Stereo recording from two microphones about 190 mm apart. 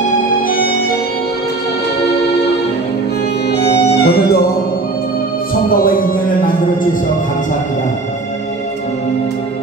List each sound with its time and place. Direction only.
0.5 s music: 50° left (ahead or behind)
3.5 s music: 60° left (ahead or behind)
5.7 s music: 50° left (ahead or behind)